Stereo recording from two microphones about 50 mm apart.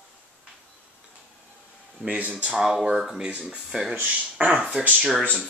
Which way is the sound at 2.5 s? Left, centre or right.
Centre.